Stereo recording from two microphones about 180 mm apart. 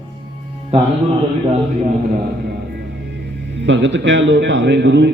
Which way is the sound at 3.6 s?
85° right.